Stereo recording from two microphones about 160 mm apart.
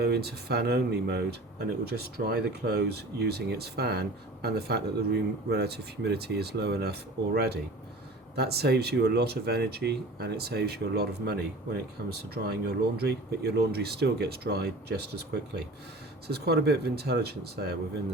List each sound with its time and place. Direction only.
0.0 s speech: 85° right